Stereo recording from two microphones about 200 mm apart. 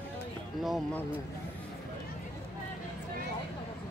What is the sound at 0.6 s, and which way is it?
Speech, centre (ahead or behind).